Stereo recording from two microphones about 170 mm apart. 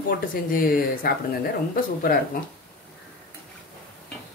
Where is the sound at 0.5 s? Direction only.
55° left (ahead or behind).